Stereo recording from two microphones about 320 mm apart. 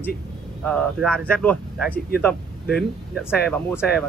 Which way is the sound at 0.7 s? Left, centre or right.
Centre.